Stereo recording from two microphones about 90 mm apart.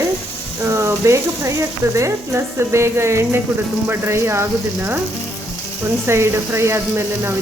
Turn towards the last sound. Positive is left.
turn(degrees=-30)  # may be behind; listen again after turning